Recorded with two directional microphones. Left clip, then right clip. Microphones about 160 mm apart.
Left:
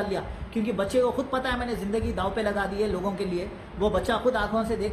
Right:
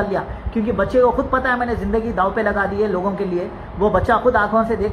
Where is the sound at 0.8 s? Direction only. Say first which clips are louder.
Right 9 dB; 25° left (ahead or behind).